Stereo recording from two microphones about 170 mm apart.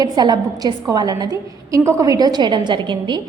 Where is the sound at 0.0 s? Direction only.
25° right (ahead or behind).